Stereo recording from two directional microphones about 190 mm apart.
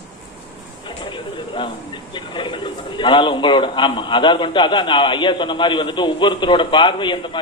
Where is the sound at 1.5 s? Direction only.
25° left (ahead or behind).